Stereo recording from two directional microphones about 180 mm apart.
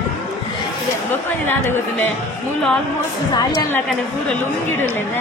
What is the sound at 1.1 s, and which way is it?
Speech, 10° left (ahead or behind).